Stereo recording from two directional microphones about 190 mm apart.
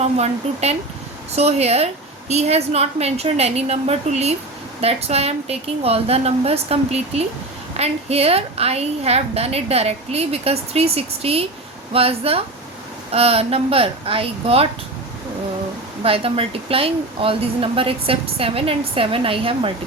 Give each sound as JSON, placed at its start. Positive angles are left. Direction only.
{"t": 0.0, "sound": "a woman's voice", "side_deg": -35}
{"t": 16.0, "sound": "speech", "side_deg": -30}